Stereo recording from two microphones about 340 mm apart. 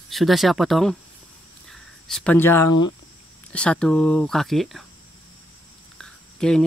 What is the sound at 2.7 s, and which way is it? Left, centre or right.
Speech, left.